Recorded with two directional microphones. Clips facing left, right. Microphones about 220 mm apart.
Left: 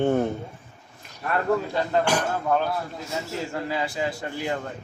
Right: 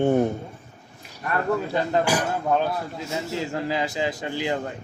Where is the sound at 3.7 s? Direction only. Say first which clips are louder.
Right 1 dB; 20° right (ahead or behind).